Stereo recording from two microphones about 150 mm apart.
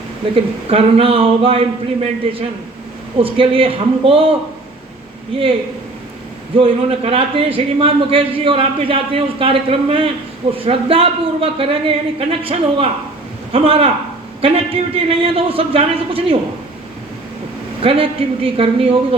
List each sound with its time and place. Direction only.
0.3 s speech: 40° right (ahead or behind)
6.6 s speech: 40° right (ahead or behind)
17.8 s speech: 40° right (ahead or behind)